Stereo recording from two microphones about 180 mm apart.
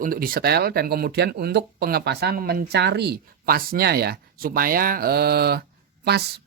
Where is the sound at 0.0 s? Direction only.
55° right (ahead or behind).